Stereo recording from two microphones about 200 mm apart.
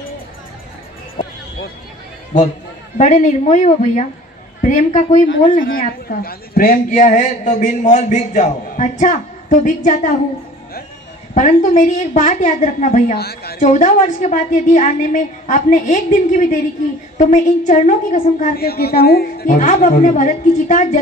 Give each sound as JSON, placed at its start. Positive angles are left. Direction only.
{"t": 3.0, "sound": "a woman's voice", "side_deg": 40}
{"t": 11.3, "sound": "a woman's voice", "side_deg": 35}
{"t": 13.1, "sound": "a woman's voice", "side_deg": 50}
{"t": 13.7, "sound": "a woman's voice", "side_deg": 35}